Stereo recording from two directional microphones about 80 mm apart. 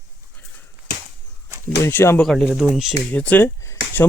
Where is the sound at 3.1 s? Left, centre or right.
Left.